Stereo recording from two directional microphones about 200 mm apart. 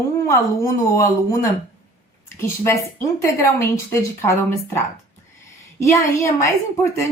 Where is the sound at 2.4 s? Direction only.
15° left (ahead or behind).